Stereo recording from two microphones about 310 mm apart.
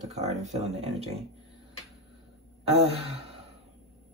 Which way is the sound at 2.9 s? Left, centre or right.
Centre.